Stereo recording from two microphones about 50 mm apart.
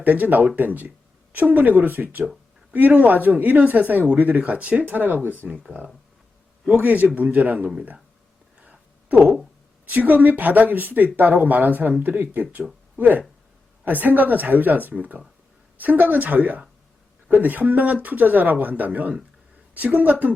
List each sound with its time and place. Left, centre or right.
0.0 s speech: right
6.7 s speech: right
8.6 s a sound: right
9.8 s speech: right